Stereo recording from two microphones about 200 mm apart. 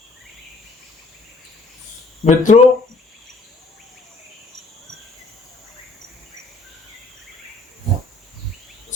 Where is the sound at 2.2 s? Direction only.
40° left (ahead or behind).